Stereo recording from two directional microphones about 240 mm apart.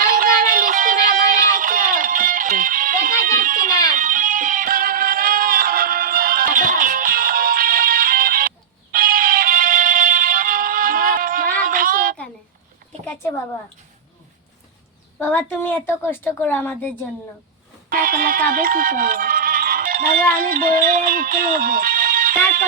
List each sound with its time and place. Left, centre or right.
0.0 s music: right
15.2 s a woman's voice: centre
17.9 s speech: right